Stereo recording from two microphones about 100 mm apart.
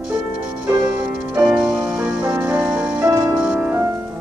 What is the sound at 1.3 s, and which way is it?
Music, 10° right (ahead or behind).